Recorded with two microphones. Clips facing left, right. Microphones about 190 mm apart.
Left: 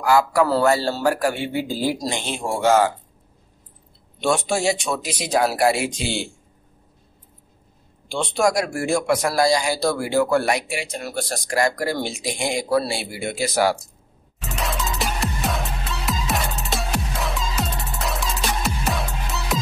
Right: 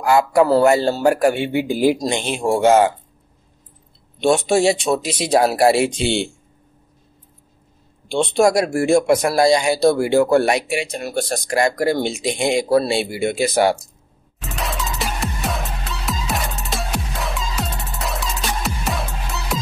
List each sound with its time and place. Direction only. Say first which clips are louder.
0.0 s speech: right 3 dB; 25° right (ahead or behind)
4.5 s speech: right 6 dB; 25° right (ahead or behind)
8.1 s speech: right 5 dB; 25° right (ahead or behind)
14.4 s music: even; centre (ahead or behind)